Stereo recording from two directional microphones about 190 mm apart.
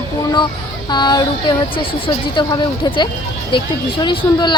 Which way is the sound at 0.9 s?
20° left (ahead or behind).